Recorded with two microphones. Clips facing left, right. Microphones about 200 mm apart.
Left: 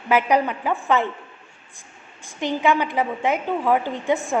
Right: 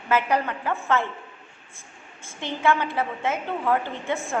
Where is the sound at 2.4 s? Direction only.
15° left (ahead or behind).